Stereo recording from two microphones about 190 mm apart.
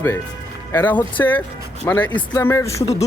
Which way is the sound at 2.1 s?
25° left (ahead or behind).